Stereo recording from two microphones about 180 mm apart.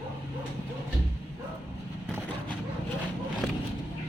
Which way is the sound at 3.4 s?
Centre (ahead or behind).